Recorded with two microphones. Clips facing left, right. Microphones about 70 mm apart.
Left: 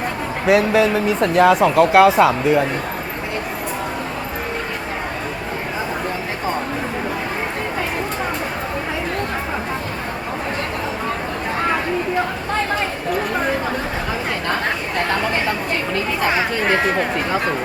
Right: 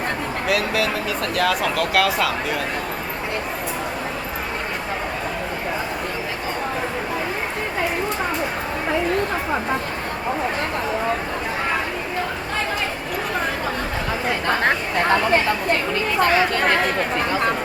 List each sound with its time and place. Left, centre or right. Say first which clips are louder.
0.4 s speech: left 8 dB; left